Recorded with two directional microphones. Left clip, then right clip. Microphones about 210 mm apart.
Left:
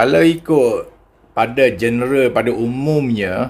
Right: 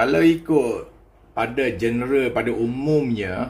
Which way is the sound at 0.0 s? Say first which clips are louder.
Left 5 dB; 55° left (ahead or behind).